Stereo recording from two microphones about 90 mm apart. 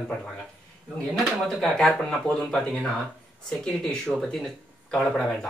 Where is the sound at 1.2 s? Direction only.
5° left (ahead or behind).